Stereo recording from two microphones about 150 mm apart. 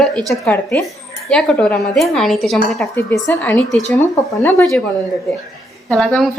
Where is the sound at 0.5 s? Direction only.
15° left (ahead or behind).